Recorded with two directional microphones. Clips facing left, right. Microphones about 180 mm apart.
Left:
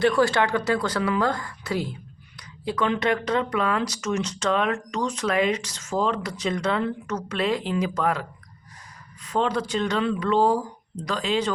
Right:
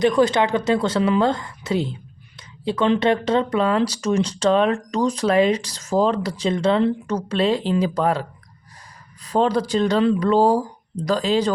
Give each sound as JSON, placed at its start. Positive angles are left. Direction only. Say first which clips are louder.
{"t": 0.0, "sound": "speech", "louder": "right 3 dB", "side_deg": -20}